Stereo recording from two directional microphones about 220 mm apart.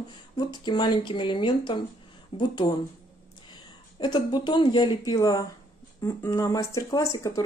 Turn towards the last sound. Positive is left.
turn(degrees=15)  # may be behind; listen again after turning